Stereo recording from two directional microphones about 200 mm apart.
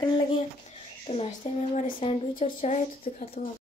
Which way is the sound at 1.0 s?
30° left (ahead or behind).